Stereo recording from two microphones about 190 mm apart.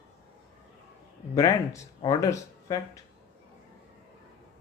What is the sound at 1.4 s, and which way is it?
Speech, 20° left (ahead or behind).